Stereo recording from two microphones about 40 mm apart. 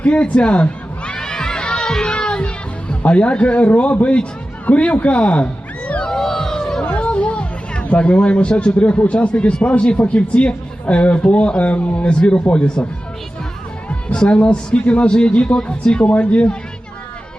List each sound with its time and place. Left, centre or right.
0.0 s a man's voice: left
1.1 s crowd: centre
3.0 s a man's voice: left
6.1 s music: centre
6.8 s music: left
7.1 s music: left
7.9 s a man's voice: left
14.1 s a man's voice: left
16.1 s a man's voice: left